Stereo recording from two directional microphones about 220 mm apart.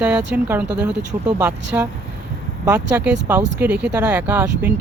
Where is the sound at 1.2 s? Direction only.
15° right (ahead or behind).